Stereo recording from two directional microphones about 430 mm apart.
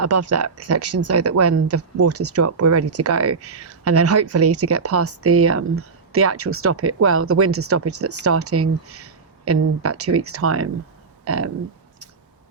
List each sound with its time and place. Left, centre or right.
0.0 s speech: right